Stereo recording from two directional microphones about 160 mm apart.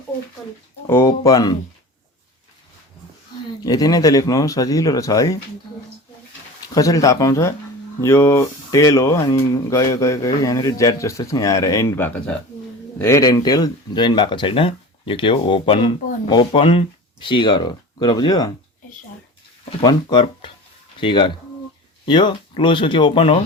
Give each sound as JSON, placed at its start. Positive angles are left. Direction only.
{"t": 0.9, "sound": "speech", "side_deg": 20}
{"t": 3.6, "sound": "speech", "side_deg": 20}
{"t": 6.7, "sound": "speech", "side_deg": 20}
{"t": 19.8, "sound": "speech", "side_deg": 25}